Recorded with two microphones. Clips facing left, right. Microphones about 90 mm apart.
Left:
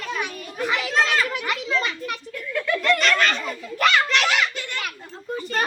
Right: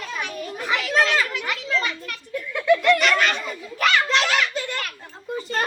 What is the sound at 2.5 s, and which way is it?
Speech, 15° right (ahead or behind).